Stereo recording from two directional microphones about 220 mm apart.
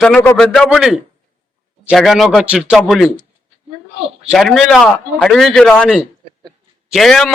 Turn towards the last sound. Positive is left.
turn(degrees=0)  # may be behind; listen again after turning